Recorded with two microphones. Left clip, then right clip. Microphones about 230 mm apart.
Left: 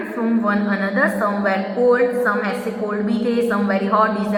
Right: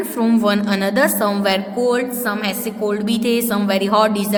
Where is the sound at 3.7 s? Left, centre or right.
Right.